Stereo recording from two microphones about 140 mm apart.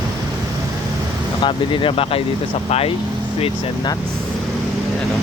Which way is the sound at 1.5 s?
40° left (ahead or behind).